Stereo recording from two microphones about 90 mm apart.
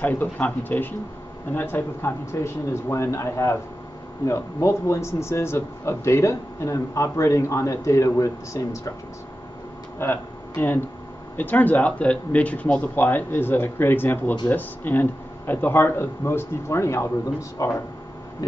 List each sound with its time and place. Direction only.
0.0 s speech: 20° left (ahead or behind); by 8.9 s 35° left (ahead or behind)
9.9 s speech: 25° left (ahead or behind)